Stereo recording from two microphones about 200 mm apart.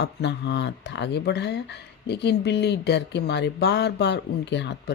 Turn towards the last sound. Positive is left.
turn(degrees=60)  # may be behind; listen again after turning